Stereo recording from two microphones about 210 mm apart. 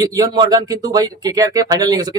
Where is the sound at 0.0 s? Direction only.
15° right (ahead or behind).